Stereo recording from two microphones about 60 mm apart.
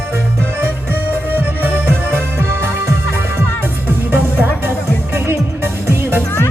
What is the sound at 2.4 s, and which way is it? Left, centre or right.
Music, right.